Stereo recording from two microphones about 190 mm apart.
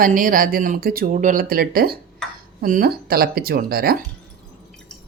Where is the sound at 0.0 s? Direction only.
45° right (ahead or behind).